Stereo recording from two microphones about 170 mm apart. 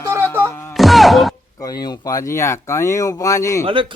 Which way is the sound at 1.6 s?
25° left (ahead or behind).